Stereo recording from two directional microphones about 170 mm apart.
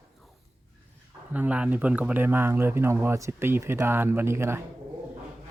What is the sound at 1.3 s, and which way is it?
Speech, 10° right (ahead or behind).